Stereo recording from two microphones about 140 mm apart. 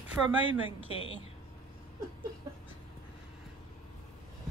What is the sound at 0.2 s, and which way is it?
Speech, 5° right (ahead or behind).